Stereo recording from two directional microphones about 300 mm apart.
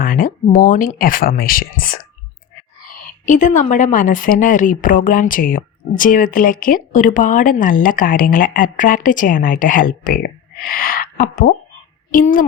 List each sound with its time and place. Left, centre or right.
0.0 s a woman's voice: left